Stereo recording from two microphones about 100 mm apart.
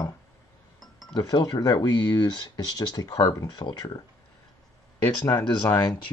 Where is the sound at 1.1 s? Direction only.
45° left (ahead or behind).